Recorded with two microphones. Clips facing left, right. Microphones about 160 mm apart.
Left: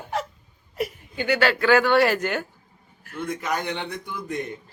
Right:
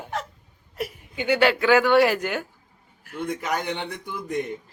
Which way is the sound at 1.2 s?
20° right (ahead or behind).